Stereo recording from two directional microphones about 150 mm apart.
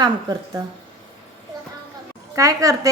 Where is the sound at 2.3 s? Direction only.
20° right (ahead or behind).